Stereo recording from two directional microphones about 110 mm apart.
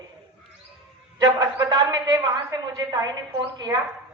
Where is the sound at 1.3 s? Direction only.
35° right (ahead or behind).